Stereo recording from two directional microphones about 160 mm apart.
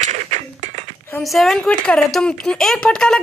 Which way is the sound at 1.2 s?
Centre (ahead or behind).